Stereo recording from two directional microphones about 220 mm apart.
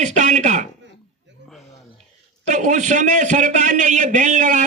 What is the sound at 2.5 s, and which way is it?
A man's voice, 35° right (ahead or behind).